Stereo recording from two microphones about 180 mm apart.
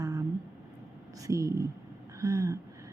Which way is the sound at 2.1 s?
15° right (ahead or behind).